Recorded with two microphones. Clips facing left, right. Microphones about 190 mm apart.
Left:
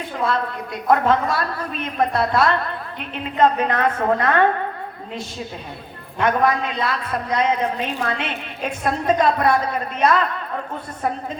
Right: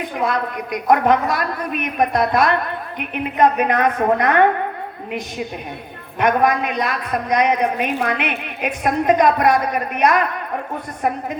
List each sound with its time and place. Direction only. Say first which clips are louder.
0.0 s a woman's voice: right 2 dB; 15° right (ahead or behind)
6.1 s a woman's voice: right 2 dB; 15° right (ahead or behind)